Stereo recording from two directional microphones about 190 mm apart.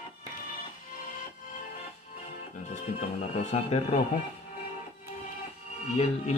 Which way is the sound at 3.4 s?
35° left (ahead or behind).